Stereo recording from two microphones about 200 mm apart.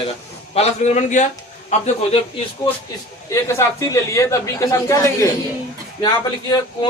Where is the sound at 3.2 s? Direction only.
15° left (ahead or behind).